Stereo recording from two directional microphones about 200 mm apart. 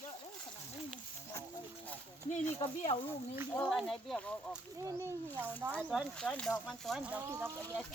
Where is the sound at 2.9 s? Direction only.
30° left (ahead or behind).